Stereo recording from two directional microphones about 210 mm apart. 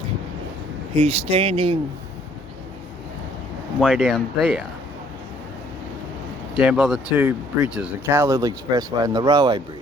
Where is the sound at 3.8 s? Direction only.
5° right (ahead or behind).